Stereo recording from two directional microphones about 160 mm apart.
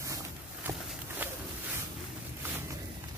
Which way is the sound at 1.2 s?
10° right (ahead or behind).